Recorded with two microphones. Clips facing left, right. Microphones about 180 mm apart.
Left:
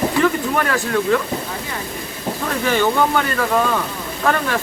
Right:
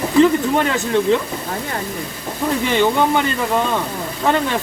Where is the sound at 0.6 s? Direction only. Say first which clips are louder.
Right 2 dB; 20° right (ahead or behind).